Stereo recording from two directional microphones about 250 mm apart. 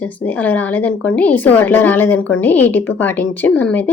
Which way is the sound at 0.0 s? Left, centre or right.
Centre.